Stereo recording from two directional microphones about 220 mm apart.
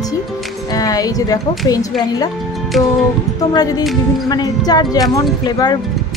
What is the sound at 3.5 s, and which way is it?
A woman's voice, 20° left (ahead or behind).